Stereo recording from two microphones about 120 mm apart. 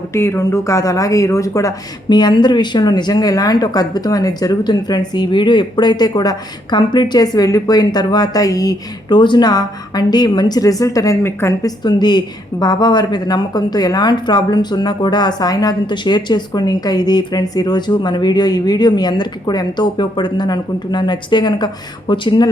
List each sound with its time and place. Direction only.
0.1 s speech: 25° left (ahead or behind)
11.6 s speech: 35° left (ahead or behind)